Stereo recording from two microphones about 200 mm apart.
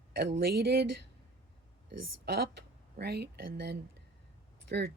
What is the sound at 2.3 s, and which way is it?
Speech, 55° right (ahead or behind).